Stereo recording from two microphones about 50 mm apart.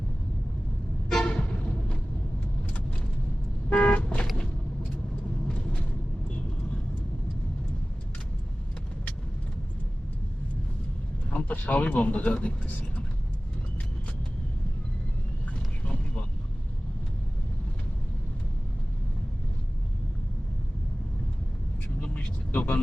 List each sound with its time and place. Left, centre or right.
1.1 s toot: centre
3.7 s car: left
4.0 s vehicle: left
11.3 s speech: left
15.8 s vehicle: left
21.8 s vehicle: left